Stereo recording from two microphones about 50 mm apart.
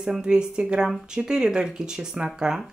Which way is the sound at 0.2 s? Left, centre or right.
Centre.